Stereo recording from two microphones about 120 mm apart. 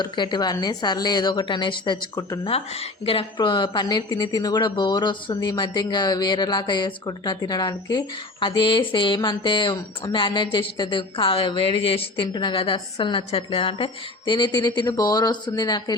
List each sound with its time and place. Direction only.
0.0 s a woman's voice: 40° left (ahead or behind)
2.4 s speech: 55° left (ahead or behind)
3.3 s a woman's voice: 40° left (ahead or behind)